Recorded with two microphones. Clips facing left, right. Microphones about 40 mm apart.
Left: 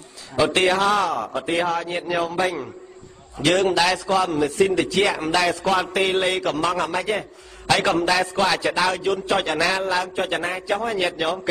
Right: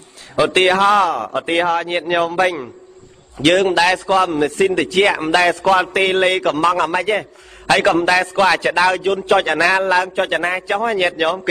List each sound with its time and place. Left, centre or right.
0.4 s a man's voice: right